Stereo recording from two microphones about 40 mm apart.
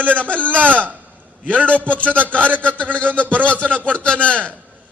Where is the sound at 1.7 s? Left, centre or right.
Left.